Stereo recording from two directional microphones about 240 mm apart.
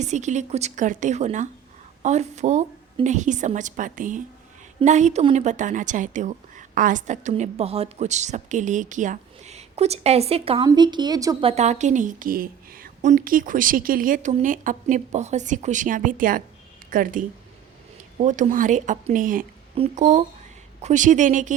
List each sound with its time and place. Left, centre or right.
0.0 s a woman's voice: right